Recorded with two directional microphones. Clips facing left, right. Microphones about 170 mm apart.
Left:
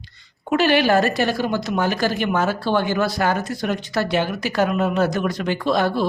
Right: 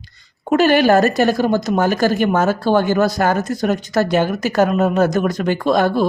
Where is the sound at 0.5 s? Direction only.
45° right (ahead or behind).